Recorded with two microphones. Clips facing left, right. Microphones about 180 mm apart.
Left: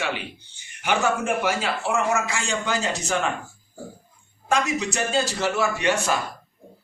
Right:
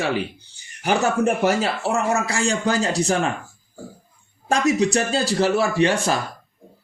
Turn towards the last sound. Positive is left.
turn(degrees=-30)  # may be behind; listen again after turning